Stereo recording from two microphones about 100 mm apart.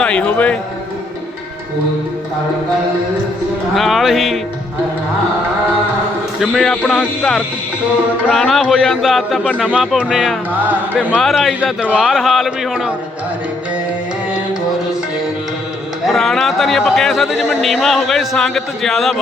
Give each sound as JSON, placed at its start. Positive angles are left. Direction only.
{"t": 0.0, "sound": "a man's voice", "side_deg": 10}
{"t": 3.8, "sound": "speech", "side_deg": 0}
{"t": 6.4, "sound": "speech", "side_deg": 5}
{"t": 8.3, "sound": "speech", "side_deg": 0}
{"t": 10.5, "sound": "speech", "side_deg": -15}
{"t": 11.2, "sound": "speech", "side_deg": 0}
{"t": 16.0, "sound": "speech", "side_deg": 5}